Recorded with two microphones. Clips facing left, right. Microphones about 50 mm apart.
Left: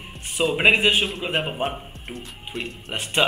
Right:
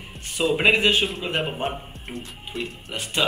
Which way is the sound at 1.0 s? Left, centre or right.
Centre.